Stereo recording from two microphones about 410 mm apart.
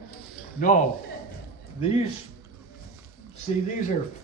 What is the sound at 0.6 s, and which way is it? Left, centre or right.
Speech, centre.